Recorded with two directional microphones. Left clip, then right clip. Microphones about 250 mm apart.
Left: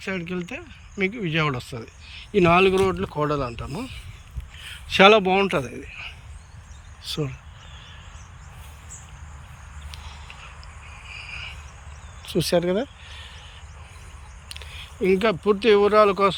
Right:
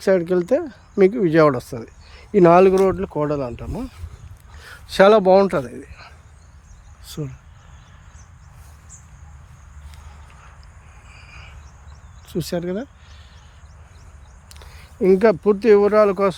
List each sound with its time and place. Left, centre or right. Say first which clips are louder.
0.0 s speech: right 13 dB; right; by 3.8 s centre
4.9 s speech: right 3 dB; right
9.9 s a sound: left 6 dB; centre
14.5 s speech: left 7 dB; right